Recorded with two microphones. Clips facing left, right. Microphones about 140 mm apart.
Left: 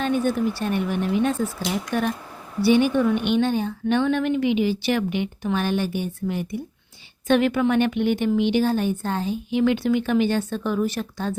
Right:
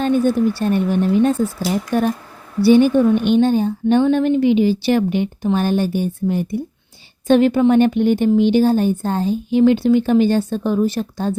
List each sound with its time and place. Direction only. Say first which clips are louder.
0.0 s a woman's voice: right 6 dB; 35° right (ahead or behind)